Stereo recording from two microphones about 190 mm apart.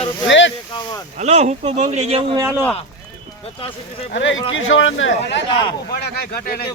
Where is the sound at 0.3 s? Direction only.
75° left (ahead or behind).